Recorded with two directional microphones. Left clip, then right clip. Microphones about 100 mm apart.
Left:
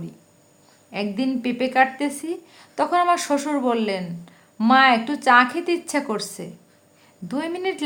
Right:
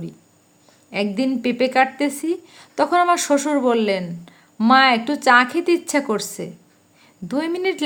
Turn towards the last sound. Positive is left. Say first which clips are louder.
# right 4 dB
turn(degrees=-30)  # may be behind; listen again after turning